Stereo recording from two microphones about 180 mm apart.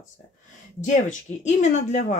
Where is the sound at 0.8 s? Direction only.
40° left (ahead or behind).